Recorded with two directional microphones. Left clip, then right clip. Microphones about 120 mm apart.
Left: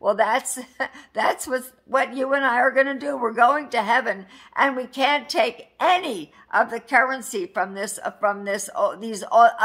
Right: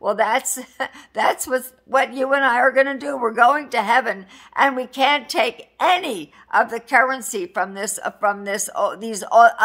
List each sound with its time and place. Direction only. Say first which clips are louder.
0.0 s a woman's voice: right 1 dB; 25° right (ahead or behind)